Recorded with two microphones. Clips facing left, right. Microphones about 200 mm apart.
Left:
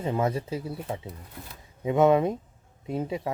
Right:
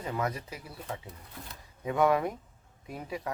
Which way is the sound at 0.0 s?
25° left (ahead or behind).